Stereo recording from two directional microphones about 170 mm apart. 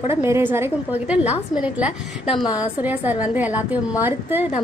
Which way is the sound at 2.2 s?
30° left (ahead or behind).